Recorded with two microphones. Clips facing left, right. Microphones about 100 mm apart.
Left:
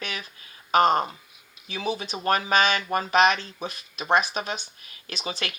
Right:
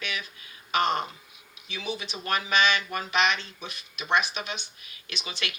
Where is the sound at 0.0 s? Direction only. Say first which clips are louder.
Even; 35° left (ahead or behind).